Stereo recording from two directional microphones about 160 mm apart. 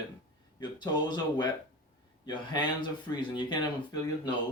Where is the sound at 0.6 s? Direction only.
25° left (ahead or behind).